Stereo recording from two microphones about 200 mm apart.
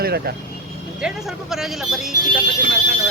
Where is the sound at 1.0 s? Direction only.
Centre (ahead or behind).